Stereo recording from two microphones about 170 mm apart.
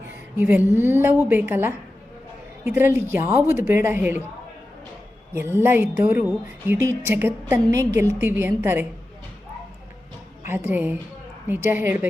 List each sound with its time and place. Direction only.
0.3 s a woman's voice: 10° right (ahead or behind)
5.3 s a woman's voice: 15° right (ahead or behind)
10.4 s a woman's voice: 10° right (ahead or behind)